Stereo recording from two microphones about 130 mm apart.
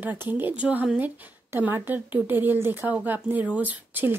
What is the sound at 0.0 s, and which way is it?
A woman's voice, 15° right (ahead or behind).